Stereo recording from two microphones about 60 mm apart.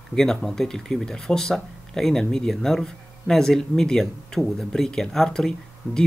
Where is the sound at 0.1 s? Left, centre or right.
Centre.